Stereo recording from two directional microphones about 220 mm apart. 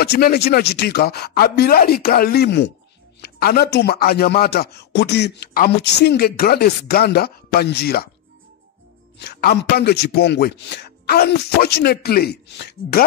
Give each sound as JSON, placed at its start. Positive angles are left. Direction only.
{"t": 0.0, "sound": "speech", "side_deg": 45}
{"t": 9.2, "sound": "speech", "side_deg": 45}